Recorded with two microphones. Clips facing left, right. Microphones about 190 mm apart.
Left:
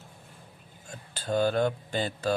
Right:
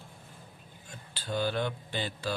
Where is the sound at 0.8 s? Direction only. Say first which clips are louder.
Left 6 dB; 45° left (ahead or behind).